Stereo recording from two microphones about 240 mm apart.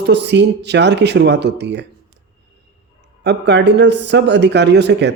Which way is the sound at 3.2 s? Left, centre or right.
Right.